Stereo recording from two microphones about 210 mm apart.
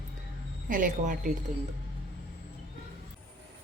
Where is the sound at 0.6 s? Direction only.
40° right (ahead or behind).